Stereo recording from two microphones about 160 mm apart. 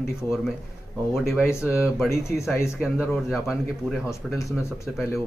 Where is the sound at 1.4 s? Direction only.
15° left (ahead or behind).